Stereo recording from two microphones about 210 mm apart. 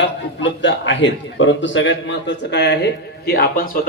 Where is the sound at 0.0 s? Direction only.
60° left (ahead or behind).